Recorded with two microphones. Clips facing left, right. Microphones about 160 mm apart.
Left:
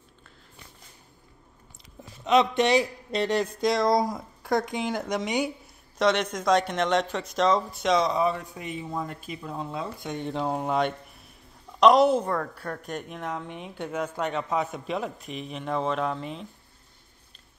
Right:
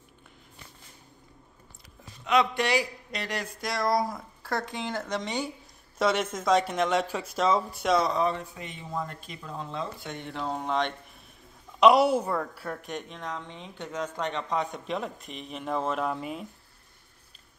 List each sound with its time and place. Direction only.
2.2 s a man's voice: 20° left (ahead or behind)
5.9 s speech: 5° right (ahead or behind)
8.2 s speech: 10° left (ahead or behind)
11.8 s a woman's voice: 10° right (ahead or behind)
13.1 s speech: 10° left (ahead or behind); by 16.4 s 5° right (ahead or behind)